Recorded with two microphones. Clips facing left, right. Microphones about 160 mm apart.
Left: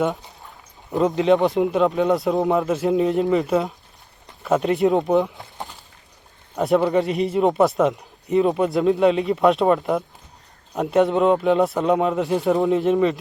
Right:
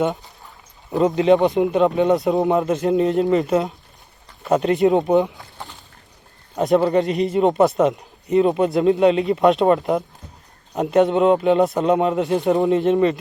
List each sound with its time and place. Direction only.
0.9 s speech: centre (ahead or behind)
6.6 s speech: centre (ahead or behind)